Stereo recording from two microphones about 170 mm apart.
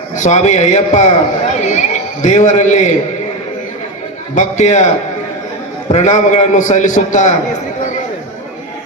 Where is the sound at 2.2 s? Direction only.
45° left (ahead or behind).